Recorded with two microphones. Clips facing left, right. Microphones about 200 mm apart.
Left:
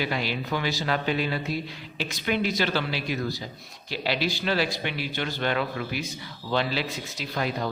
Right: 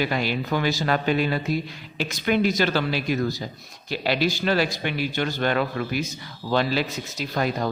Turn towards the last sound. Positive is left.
turn(degrees=-45)  # may be behind; listen again after turning